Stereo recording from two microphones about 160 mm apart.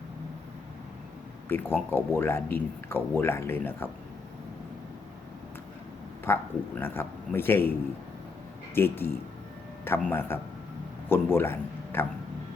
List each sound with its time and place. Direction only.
1.5 s a man's voice: 15° left (ahead or behind)
6.2 s a man's voice: 15° left (ahead or behind)
8.7 s a man's voice: 15° left (ahead or behind)